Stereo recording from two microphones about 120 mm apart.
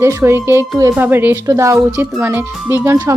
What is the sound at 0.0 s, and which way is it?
Speech, 20° right (ahead or behind).